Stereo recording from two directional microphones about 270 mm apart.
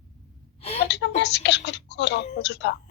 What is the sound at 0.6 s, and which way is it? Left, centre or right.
Gasp, left.